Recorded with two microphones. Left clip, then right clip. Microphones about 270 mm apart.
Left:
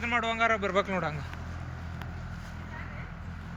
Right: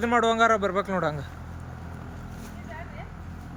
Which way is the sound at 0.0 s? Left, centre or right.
Right.